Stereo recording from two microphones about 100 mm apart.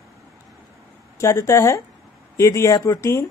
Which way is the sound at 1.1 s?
30° left (ahead or behind).